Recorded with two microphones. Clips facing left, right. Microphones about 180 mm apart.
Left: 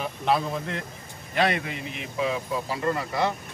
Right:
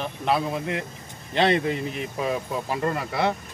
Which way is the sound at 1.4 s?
30° right (ahead or behind).